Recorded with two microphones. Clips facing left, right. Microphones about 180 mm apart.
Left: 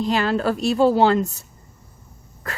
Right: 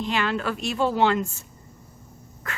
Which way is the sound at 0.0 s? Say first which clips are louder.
Left 5 dB; 35° left (ahead or behind).